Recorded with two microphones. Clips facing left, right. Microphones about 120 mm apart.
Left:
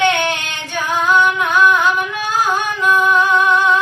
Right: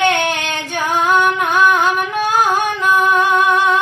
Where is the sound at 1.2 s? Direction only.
45° right (ahead or behind).